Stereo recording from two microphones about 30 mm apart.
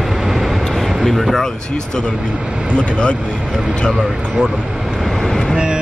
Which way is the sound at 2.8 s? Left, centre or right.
Left.